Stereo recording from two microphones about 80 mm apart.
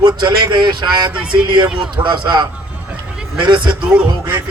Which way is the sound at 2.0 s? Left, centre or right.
Right.